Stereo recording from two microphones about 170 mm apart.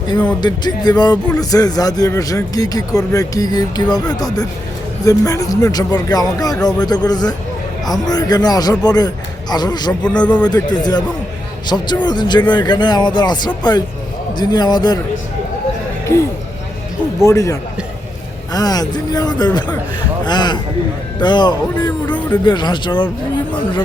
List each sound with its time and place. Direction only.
0.4 s a man's voice: 25° left (ahead or behind)
10.0 s a man's voice: 5° left (ahead or behind)
10.4 s a man's voice: 25° left (ahead or behind)
17.2 s a man's voice: 20° left (ahead or behind)
22.0 s a man's voice: 10° left (ahead or behind)
22.4 s a man's voice: 25° left (ahead or behind)